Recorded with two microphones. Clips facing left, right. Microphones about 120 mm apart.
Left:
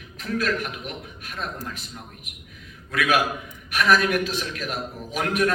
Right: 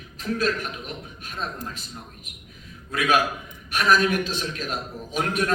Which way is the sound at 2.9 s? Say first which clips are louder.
Even; 30° right (ahead or behind).